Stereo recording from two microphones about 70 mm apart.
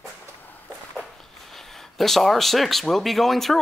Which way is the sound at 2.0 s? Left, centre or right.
Centre.